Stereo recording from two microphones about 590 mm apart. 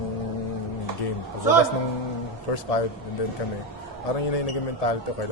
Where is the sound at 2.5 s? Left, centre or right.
Left.